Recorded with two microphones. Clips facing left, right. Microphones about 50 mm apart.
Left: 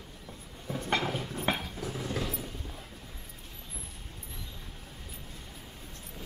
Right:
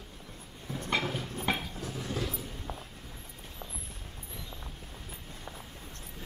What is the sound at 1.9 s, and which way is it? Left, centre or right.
Vehicle, left.